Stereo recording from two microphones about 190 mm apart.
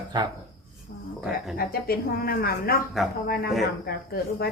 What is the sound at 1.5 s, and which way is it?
A woman's voice, 50° left (ahead or behind).